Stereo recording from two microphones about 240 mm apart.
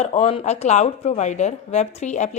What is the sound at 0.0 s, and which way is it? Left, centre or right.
A woman's voice, left.